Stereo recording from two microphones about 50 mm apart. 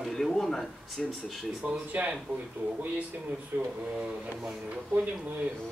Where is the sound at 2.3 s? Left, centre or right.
Right.